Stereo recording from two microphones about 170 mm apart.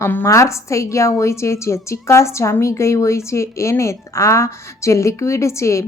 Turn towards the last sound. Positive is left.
turn(degrees=15)  # may be behind; listen again after turning